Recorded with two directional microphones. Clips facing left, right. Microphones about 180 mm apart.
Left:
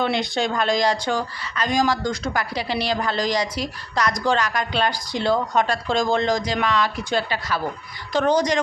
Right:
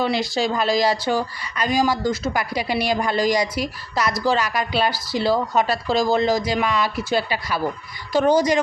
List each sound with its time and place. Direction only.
0.0 s a woman's voice: centre (ahead or behind)